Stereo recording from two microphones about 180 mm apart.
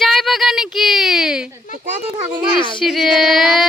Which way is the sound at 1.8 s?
40° right (ahead or behind).